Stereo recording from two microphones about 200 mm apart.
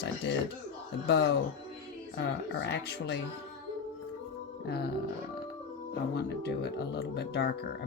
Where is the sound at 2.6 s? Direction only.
60° left (ahead or behind).